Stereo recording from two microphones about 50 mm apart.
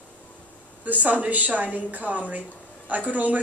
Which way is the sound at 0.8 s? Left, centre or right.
Right.